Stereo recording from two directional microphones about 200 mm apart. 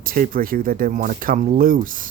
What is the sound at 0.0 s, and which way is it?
Speech, 45° right (ahead or behind).